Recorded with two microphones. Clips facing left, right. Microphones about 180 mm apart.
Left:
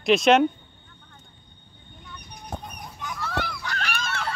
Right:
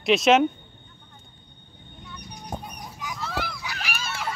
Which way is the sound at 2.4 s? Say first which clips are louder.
Right 1 dB; 5° right (ahead or behind).